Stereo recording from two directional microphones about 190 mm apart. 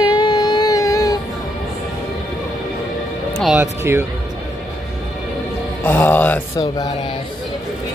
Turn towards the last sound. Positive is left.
turn(degrees=10)  # may be behind; listen again after turning